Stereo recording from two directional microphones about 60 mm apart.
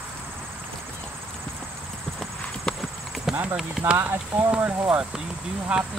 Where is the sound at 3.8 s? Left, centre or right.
Right.